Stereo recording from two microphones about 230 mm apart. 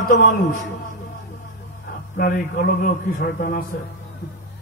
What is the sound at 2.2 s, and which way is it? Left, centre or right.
A man's voice, left.